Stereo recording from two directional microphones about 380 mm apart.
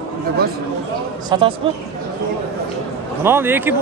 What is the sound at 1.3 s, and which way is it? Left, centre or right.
Speech, centre.